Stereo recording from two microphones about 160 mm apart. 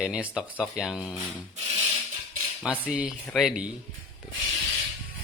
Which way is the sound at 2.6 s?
5° right (ahead or behind).